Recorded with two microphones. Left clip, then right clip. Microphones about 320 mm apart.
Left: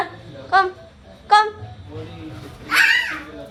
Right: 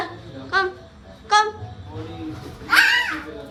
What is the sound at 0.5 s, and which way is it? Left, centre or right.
Speech, centre.